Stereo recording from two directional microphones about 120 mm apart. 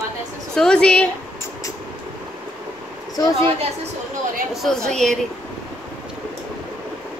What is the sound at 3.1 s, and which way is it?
Speech, 30° left (ahead or behind).